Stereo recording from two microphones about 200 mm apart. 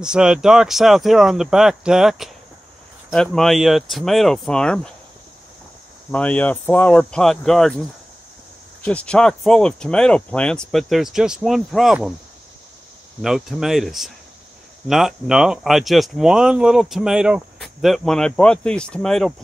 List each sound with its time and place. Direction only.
0.0 s speech: 5° right (ahead or behind)
6.1 s speech: 5° left (ahead or behind)
8.8 s speech: 5° left (ahead or behind)
13.2 s speech: centre (ahead or behind)